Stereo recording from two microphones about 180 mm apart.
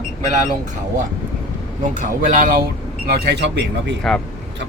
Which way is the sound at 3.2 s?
70° right (ahead or behind).